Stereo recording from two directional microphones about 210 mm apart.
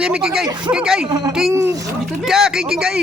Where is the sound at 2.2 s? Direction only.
Centre (ahead or behind).